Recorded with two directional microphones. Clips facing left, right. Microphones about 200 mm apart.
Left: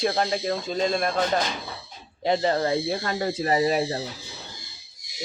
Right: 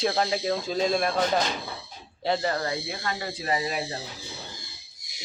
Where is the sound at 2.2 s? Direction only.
20° left (ahead or behind); by 3.9 s 40° left (ahead or behind).